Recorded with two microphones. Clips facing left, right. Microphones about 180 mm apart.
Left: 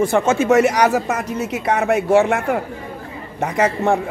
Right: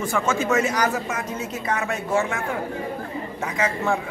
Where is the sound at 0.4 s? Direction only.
75° left (ahead or behind).